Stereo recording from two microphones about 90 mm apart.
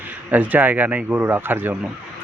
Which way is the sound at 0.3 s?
20° right (ahead or behind).